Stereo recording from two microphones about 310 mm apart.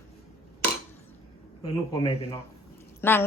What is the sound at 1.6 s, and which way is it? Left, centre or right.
A woman's voice, centre.